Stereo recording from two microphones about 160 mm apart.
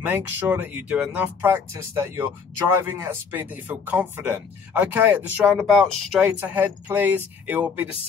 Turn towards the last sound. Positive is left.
turn(degrees=-10)  # may be behind; listen again after turning